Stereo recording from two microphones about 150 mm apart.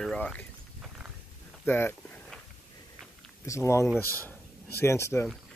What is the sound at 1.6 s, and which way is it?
Speech, 15° left (ahead or behind).